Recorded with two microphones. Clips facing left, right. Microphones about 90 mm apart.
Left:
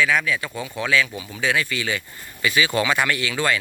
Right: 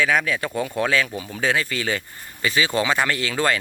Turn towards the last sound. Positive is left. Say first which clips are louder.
# right 1 dB
turn(degrees=-40)  # may be behind; listen again after turning